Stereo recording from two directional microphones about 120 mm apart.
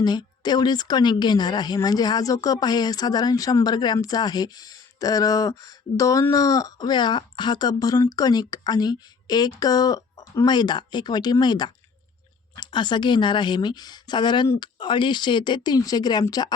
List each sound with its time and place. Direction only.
0.0 s speech: 35° left (ahead or behind)